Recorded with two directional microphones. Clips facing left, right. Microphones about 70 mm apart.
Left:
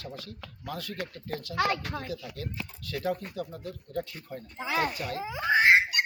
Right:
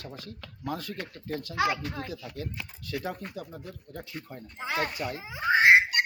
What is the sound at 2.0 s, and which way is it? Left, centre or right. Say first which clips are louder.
Speech: left 1 dB; right.